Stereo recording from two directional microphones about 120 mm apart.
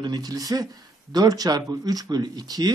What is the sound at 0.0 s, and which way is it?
Speech, 35° right (ahead or behind).